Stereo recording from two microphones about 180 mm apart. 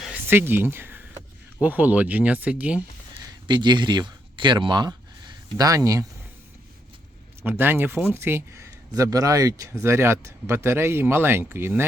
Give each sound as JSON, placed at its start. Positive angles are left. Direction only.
{"t": 0.0, "sound": "a sound", "side_deg": -10}
{"t": 1.6, "sound": "speech", "side_deg": -10}
{"t": 3.2, "sound": "speech", "side_deg": -25}
{"t": 7.4, "sound": "speech", "side_deg": -10}